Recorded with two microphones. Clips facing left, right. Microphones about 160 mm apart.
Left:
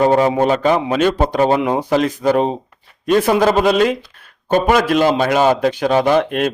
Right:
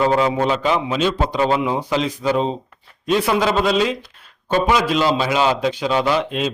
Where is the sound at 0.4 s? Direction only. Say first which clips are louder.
Left 4 dB; 50° left (ahead or behind).